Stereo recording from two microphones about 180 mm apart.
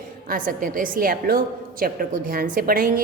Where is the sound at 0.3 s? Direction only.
50° right (ahead or behind).